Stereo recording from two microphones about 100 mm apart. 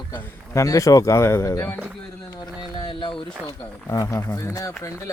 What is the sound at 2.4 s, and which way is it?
Speech, 50° left (ahead or behind).